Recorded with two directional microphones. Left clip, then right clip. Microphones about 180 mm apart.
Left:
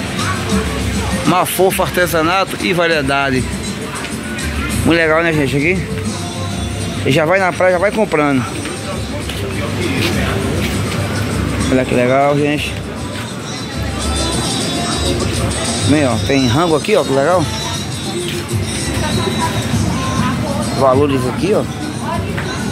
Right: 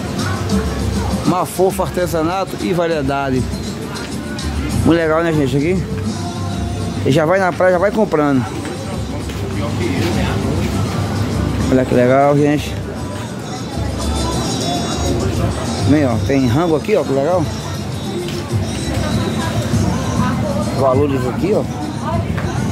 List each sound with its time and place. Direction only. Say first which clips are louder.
1.3 s speech: left 3 dB; 10° right (ahead or behind)
4.8 s speech: left 2 dB; 15° right (ahead or behind)
7.1 s speech: left 1 dB; 20° right (ahead or behind)
11.7 s speech: right 1 dB; 20° right (ahead or behind)
16.1 s speech: left 2 dB; 10° right (ahead or behind)
20.8 s speech: left 3 dB; 15° left (ahead or behind)